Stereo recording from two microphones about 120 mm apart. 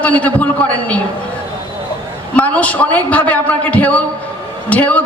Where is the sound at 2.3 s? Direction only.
10° left (ahead or behind).